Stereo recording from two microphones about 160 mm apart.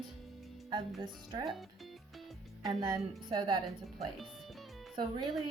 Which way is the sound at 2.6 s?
25° right (ahead or behind).